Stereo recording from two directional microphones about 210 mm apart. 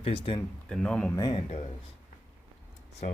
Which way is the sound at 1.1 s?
20° left (ahead or behind).